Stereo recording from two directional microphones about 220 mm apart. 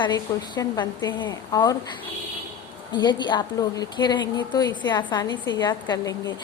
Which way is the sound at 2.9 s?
20° left (ahead or behind).